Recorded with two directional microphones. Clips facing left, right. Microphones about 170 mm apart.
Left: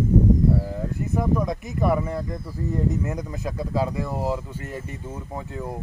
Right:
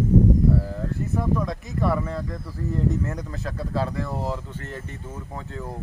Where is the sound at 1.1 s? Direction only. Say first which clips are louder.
Left 3 dB; 15° left (ahead or behind).